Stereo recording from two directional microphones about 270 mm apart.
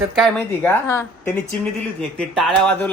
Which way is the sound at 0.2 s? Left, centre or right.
Centre.